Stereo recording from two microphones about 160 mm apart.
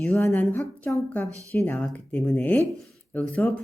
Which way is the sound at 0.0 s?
15° left (ahead or behind).